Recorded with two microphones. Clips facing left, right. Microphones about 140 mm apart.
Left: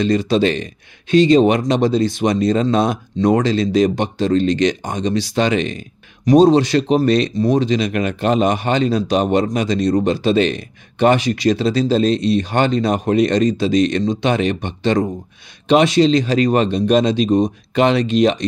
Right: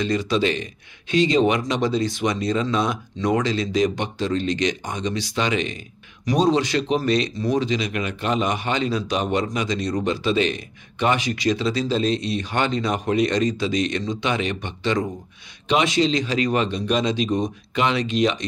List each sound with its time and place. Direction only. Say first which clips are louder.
0.0 s speech: left 6 dB; 40° left (ahead or behind)
2.2 s a man's voice: left 7 dB; 45° left (ahead or behind)
3.4 s speech: left 6 dB; 35° left (ahead or behind)
7.8 s a man's voice: left 7 dB; 50° left (ahead or behind)